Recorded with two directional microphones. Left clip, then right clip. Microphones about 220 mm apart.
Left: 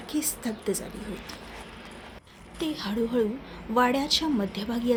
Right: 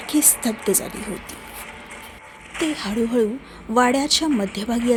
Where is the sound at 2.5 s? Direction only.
35° right (ahead or behind).